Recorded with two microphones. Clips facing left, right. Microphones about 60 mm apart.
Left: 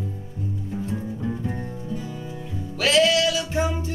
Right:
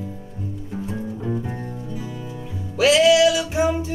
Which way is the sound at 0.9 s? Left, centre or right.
Centre.